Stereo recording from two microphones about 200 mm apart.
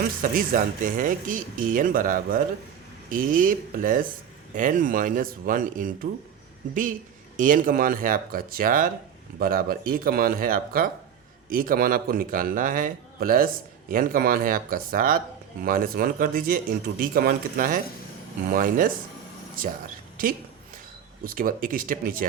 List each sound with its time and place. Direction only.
0.0 s a man's voice: 45° right (ahead or behind)
7.3 s a man's voice: 40° right (ahead or behind)
21.2 s a man's voice: 45° right (ahead or behind)